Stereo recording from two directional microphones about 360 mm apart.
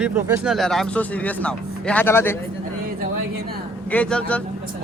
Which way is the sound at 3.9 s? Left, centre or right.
Centre.